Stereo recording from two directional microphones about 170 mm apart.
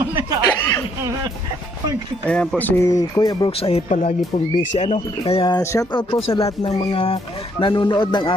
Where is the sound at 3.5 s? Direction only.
35° left (ahead or behind).